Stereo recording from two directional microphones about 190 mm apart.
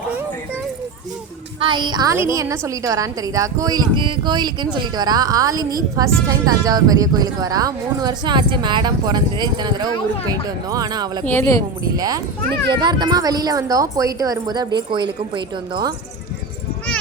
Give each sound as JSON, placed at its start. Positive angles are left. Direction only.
{"t": 1.5, "sound": "a woman's voice", "side_deg": -25}
{"t": 11.3, "sound": "speech", "side_deg": 15}
{"t": 11.9, "sound": "a woman's voice", "side_deg": -20}